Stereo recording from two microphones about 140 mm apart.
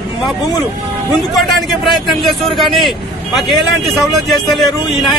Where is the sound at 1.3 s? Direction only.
Centre (ahead or behind).